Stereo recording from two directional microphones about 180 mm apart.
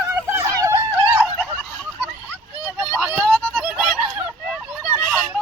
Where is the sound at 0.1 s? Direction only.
15° right (ahead or behind).